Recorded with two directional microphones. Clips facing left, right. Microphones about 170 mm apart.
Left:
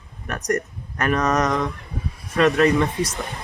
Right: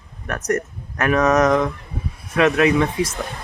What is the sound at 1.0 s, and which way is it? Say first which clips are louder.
Speech: right 5 dB; 5° right (ahead or behind).